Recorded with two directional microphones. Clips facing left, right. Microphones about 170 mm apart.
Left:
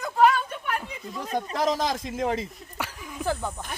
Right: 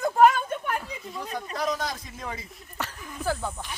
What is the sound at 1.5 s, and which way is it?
Speech, 90° left.